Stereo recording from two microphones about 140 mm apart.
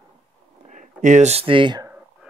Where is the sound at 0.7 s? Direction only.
60° right (ahead or behind); by 1.8 s 35° right (ahead or behind).